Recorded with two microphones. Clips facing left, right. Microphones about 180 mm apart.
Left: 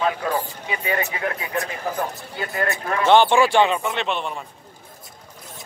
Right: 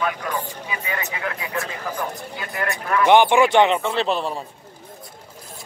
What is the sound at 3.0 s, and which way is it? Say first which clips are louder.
Speech: right 1 dB; 15° right (ahead or behind).